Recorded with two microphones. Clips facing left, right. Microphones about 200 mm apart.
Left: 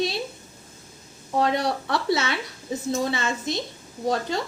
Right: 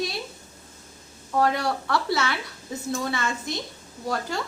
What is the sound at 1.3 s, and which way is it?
Speech, 20° left (ahead or behind).